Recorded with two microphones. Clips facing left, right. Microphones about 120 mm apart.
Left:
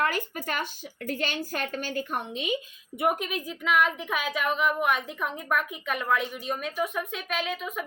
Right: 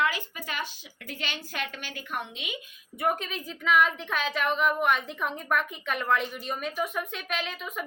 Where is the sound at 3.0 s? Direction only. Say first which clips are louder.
Left 2 dB; 15° left (ahead or behind).